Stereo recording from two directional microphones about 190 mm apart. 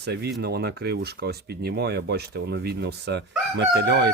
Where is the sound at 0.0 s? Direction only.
60° right (ahead or behind).